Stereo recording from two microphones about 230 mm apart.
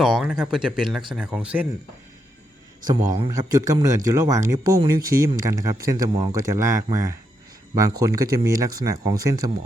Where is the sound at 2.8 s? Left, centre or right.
Centre.